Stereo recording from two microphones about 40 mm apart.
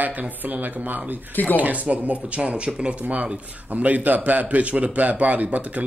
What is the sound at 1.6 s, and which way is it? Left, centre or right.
A man's voice, right.